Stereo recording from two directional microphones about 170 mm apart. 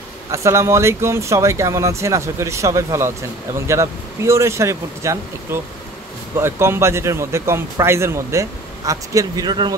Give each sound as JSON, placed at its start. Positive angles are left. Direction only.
{"t": 0.3, "sound": "speech", "side_deg": -15}